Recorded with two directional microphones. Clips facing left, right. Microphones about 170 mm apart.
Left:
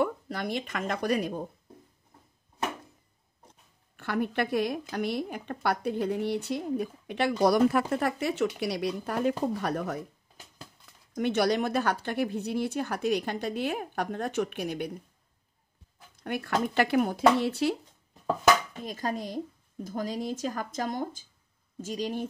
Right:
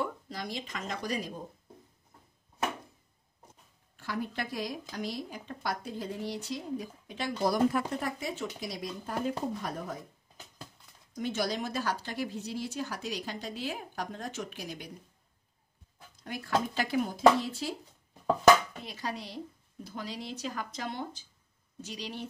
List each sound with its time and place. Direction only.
0.0 s speech: 60° left (ahead or behind)
3.9 s a woman's voice: 65° left (ahead or behind)
11.1 s a woman's voice: 65° left (ahead or behind)
16.3 s a woman's voice: 60° left (ahead or behind)
18.9 s speech: 45° left (ahead or behind)